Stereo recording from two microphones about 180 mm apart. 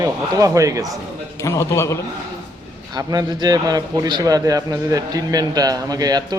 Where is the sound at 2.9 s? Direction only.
20° right (ahead or behind).